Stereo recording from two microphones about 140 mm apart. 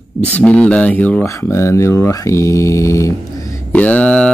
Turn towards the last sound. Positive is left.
turn(degrees=10)  # may be behind; listen again after turning